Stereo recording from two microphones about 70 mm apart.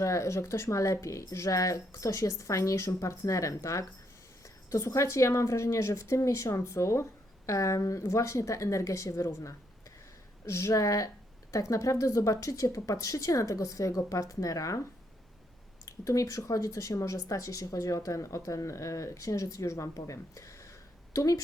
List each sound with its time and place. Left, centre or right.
0.0 s speech: left
15.9 s speech: left